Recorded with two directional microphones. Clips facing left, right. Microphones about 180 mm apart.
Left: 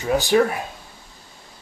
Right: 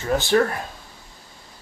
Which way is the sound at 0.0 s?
15° left (ahead or behind).